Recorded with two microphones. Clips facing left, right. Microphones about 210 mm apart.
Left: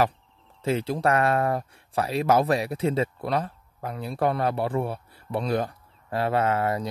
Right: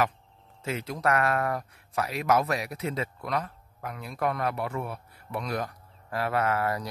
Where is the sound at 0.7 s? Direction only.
30° left (ahead or behind).